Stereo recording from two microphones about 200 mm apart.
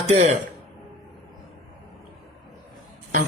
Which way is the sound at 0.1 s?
40° right (ahead or behind).